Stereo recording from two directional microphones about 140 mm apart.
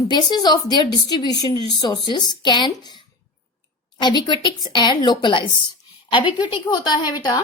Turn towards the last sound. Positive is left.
turn(degrees=30)  # may be behind; listen again after turning